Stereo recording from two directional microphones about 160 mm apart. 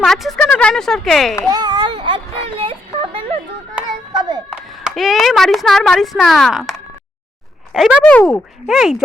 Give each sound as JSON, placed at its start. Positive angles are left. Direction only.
{"t": 0.0, "sound": "speech", "side_deg": 0}
{"t": 1.5, "sound": "a sound", "side_deg": -25}
{"t": 4.4, "sound": "speech", "side_deg": -5}
{"t": 8.0, "sound": "speech", "side_deg": 10}